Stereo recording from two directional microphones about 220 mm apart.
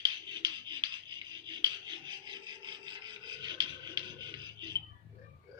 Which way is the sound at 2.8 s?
20° right (ahead or behind).